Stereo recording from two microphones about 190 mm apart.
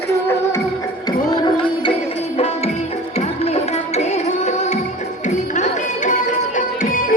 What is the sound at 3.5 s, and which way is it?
Music, 35° left (ahead or behind).